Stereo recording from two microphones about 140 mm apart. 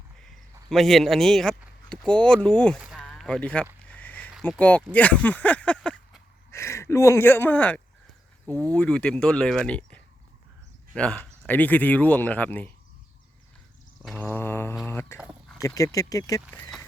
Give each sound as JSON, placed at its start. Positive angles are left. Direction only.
{"t": 0.2, "sound": "speech", "side_deg": 0}
{"t": 3.0, "sound": "a sound", "side_deg": 5}
{"t": 4.4, "sound": "speech", "side_deg": 10}
{"t": 6.5, "sound": "speech", "side_deg": 20}
{"t": 14.2, "sound": "mantra", "side_deg": 15}
{"t": 14.8, "sound": "a sound", "side_deg": 15}
{"t": 15.6, "sound": "speech", "side_deg": 25}